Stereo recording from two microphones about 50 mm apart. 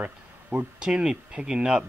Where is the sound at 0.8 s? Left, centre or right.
Centre.